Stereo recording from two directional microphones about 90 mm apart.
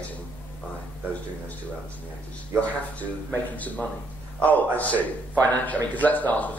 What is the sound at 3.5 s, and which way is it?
A man's voice, 15° left (ahead or behind).